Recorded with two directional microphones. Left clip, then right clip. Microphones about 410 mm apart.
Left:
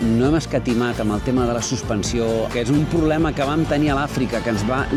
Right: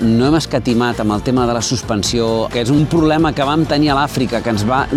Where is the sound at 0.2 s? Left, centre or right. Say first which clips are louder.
Right 5 dB; right.